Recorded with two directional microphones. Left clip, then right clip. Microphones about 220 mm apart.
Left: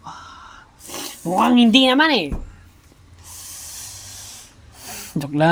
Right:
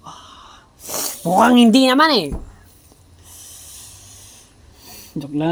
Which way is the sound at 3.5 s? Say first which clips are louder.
Left 6 dB; 30° left (ahead or behind).